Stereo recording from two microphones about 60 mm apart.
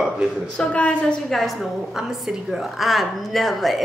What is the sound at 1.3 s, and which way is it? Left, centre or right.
A woman's voice, centre.